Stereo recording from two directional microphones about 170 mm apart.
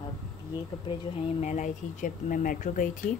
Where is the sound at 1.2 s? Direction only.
40° left (ahead or behind).